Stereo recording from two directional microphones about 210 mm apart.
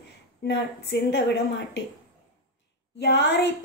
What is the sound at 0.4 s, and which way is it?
Speech, 55° left (ahead or behind).